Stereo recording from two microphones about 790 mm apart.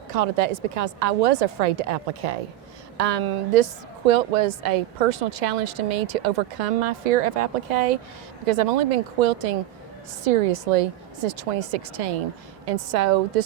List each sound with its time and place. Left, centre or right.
0.1 s a woman's voice: right